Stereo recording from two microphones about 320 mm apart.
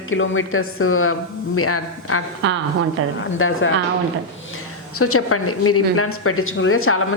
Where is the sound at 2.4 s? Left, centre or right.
Right.